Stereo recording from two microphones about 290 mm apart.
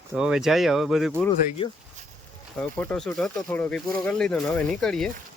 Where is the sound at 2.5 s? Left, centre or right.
Centre.